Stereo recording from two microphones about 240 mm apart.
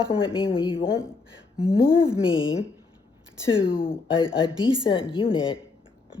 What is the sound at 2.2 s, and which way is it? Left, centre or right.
Speech, left.